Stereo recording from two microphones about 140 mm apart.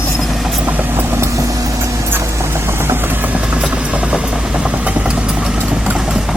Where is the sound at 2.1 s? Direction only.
15° right (ahead or behind).